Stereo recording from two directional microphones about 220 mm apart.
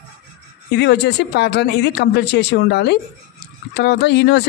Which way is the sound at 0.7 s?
50° left (ahead or behind).